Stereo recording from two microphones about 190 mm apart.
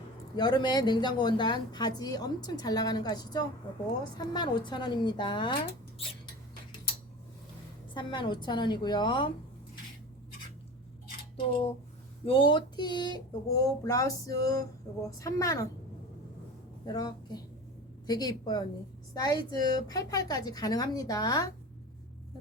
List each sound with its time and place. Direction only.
0.3 s speech: 25° left (ahead or behind)
7.9 s speech: 25° left (ahead or behind)
11.3 s a woman's voice: 30° left (ahead or behind)
16.8 s a woman's voice: 20° left (ahead or behind)